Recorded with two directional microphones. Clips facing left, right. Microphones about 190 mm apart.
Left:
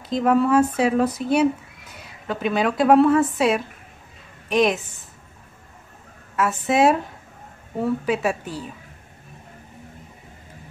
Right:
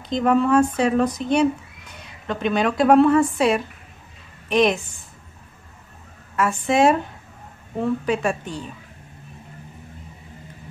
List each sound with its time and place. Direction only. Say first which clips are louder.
0.1 s speech: even; 5° left (ahead or behind)
6.3 s speech: right 1 dB; centre (ahead or behind)